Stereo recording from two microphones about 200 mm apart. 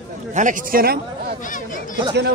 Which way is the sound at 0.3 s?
40° right (ahead or behind).